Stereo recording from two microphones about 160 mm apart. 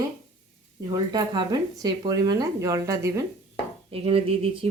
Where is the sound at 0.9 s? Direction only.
25° right (ahead or behind).